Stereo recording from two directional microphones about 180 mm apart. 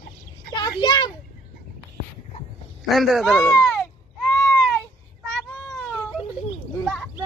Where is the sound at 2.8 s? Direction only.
Centre (ahead or behind).